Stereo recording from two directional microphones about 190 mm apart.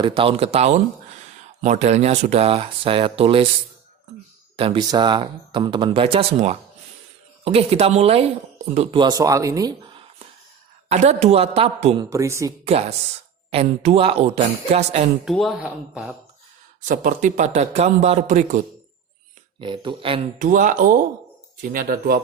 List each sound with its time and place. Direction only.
0.0 s a man's voice: 30° right (ahead or behind)
4.5 s a man's voice: 30° right (ahead or behind)
12.1 s speech: 15° right (ahead or behind)
13.5 s a man's voice: 30° right (ahead or behind)
15.2 s speech: centre (ahead or behind)
16.8 s a man's voice: 45° right (ahead or behind)
19.5 s speech: 25° right (ahead or behind)
20.4 s speech: 45° right (ahead or behind)